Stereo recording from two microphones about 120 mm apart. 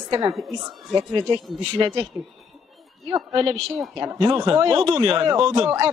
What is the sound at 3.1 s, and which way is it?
Speech, 35° right (ahead or behind).